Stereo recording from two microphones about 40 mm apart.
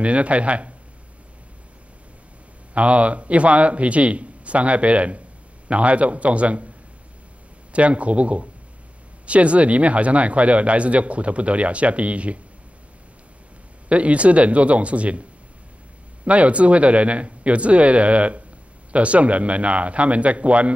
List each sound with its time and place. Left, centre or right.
0.0 s a man's voice: right
2.7 s a man's voice: right
7.7 s a man's voice: right
13.8 s a man's voice: right
16.3 s a man's voice: right